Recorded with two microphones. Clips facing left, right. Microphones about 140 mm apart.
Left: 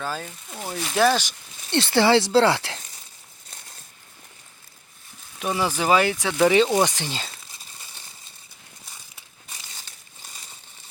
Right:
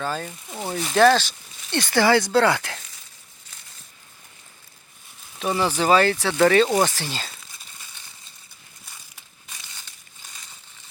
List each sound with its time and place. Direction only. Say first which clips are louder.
0.0 s speech: right 2 dB; 5° left (ahead or behind)
0.3 s speech: right 3 dB; 10° right (ahead or behind)
0.8 s speech: right 4 dB; 5° left (ahead or behind)
1.8 s speech: even; 25° left (ahead or behind)
5.5 s speech: right 2 dB; 10° left (ahead or behind)